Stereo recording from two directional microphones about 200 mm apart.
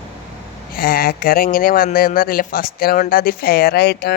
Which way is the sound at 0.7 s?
45° left (ahead or behind).